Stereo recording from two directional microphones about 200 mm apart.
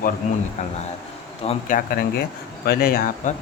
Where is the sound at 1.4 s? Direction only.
40° left (ahead or behind).